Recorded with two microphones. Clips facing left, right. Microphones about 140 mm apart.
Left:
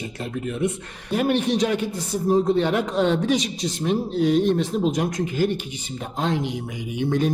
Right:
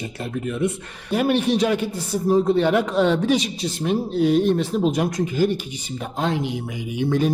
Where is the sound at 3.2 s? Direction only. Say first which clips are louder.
Right 2 dB; 10° right (ahead or behind).